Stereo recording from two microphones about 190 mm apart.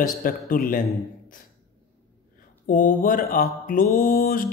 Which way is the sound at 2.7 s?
45° left (ahead or behind).